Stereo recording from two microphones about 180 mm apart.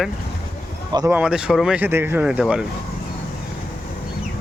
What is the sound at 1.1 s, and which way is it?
Speech, 5° right (ahead or behind).